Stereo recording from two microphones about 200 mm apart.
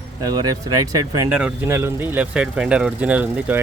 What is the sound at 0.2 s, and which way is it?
Speech, 20° right (ahead or behind).